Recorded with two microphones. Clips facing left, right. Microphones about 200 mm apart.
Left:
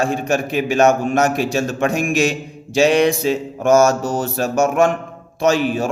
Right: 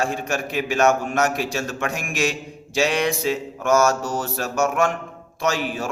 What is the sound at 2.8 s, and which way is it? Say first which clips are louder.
Mantra: left 7 dB; 20° left (ahead or behind).